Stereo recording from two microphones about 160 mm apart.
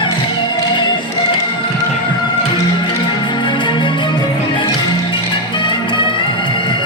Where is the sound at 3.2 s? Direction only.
30° left (ahead or behind).